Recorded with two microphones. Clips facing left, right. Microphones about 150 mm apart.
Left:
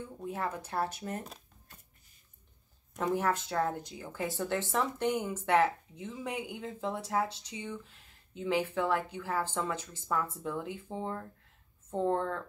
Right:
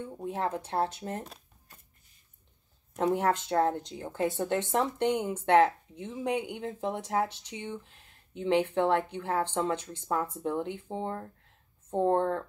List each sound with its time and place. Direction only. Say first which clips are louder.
0.2 s speech: right 4 dB; 25° right (ahead or behind)
3.0 s speech: right 4 dB; 20° right (ahead or behind)